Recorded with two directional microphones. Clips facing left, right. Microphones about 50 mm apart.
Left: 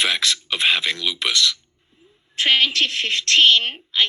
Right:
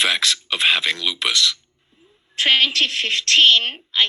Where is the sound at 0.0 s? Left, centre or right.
Right.